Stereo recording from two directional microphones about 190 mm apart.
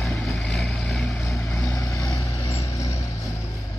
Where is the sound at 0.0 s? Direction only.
Centre (ahead or behind).